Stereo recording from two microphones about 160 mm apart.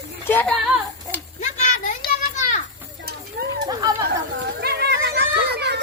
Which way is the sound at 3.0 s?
80° right.